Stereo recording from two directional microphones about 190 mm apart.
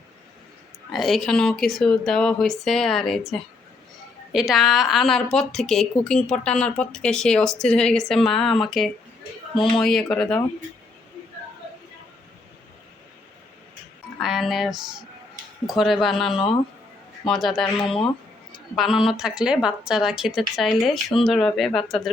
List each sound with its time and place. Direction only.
0.9 s a woman's voice: centre (ahead or behind)
9.6 s speech: 25° left (ahead or behind)
9.8 s a woman's voice: 5° left (ahead or behind)
14.2 s a woman's voice: centre (ahead or behind)